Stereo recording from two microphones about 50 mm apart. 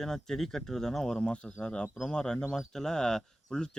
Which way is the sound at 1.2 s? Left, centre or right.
Left.